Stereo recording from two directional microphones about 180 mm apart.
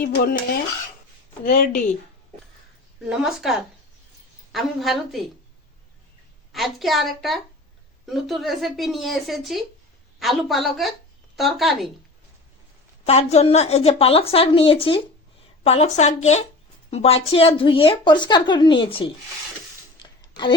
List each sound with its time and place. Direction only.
0.0 s speech: 55° left (ahead or behind)
3.1 s a woman's voice: 5° right (ahead or behind)
4.5 s a woman's voice: centre (ahead or behind)
6.5 s a woman's voice: centre (ahead or behind)
13.1 s a woman's voice: 35° left (ahead or behind)
20.0 s a sound: 25° left (ahead or behind)